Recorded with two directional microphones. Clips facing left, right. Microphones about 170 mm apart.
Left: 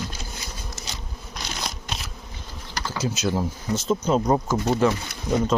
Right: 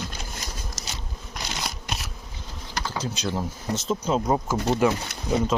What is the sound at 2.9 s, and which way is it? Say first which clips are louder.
Speech: left 5 dB; 5° left (ahead or behind).